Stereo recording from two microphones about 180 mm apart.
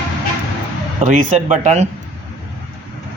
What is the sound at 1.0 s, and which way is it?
Speech, 40° right (ahead or behind).